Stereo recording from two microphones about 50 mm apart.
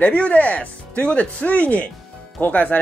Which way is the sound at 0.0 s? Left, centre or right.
Left.